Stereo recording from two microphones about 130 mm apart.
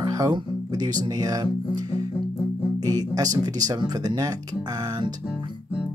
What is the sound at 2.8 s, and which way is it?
Speech, 30° right (ahead or behind).